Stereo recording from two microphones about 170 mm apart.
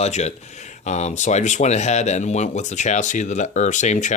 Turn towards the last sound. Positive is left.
turn(degrees=45)  # may be behind; listen again after turning